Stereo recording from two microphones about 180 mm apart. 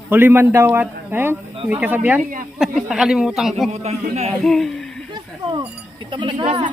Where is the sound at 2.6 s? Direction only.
Centre (ahead or behind).